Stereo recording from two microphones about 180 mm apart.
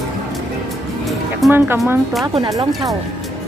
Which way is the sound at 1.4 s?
10° right (ahead or behind).